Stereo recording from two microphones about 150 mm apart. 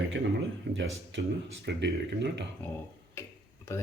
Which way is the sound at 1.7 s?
90° right.